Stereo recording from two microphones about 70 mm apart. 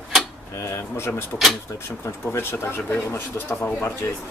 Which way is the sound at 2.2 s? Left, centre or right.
Left.